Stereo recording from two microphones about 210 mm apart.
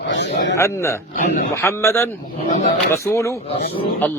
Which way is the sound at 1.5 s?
15° left (ahead or behind).